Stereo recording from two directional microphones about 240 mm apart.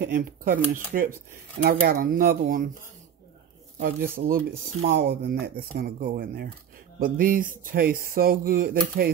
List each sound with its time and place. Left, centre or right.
0.0 s speech: right
4.2 s speech: right